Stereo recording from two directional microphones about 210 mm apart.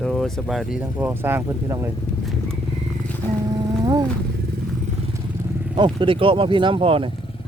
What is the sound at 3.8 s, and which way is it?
Wild animals, 20° right (ahead or behind).